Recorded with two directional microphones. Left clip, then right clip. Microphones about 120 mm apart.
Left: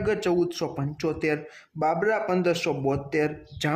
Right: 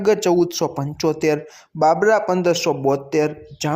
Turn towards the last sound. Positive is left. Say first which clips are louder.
# right 4 dB
turn(degrees=-15)  # may be behind; listen again after turning